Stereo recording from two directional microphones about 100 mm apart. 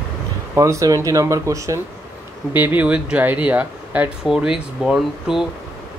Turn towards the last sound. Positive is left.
turn(degrees=-5)  # may be behind; listen again after turning